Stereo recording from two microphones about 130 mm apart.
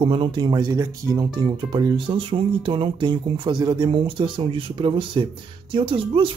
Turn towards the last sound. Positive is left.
turn(degrees=-40)  # may be behind; listen again after turning